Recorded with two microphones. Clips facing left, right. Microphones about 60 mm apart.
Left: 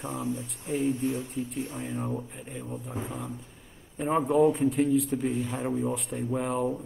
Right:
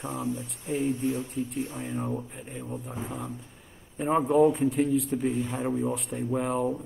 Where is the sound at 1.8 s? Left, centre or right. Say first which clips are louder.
Right 1 dB; centre.